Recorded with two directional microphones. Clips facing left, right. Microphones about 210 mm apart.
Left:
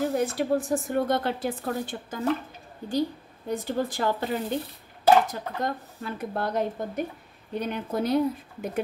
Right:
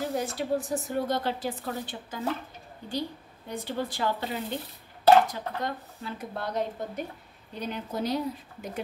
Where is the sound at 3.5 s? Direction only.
45° left (ahead or behind).